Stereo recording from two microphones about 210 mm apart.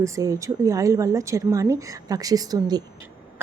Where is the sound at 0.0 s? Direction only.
15° right (ahead or behind).